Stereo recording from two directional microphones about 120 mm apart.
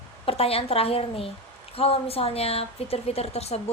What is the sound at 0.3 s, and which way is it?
A woman's voice, 55° left (ahead or behind).